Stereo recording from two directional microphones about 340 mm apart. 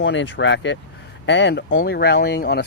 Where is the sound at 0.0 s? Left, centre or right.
Left.